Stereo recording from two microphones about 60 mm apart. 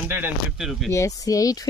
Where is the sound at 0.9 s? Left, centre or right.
Left.